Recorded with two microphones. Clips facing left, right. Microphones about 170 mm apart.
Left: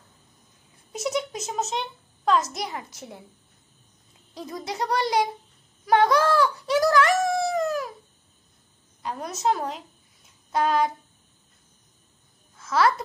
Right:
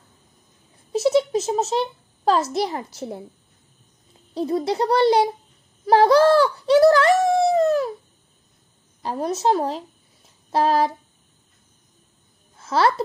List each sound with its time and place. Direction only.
0.9 s a child's voice: 30° right (ahead or behind)
4.3 s a child's voice: 30° right (ahead or behind)
9.0 s a child's voice: 30° right (ahead or behind)
12.5 s a child's voice: 30° right (ahead or behind)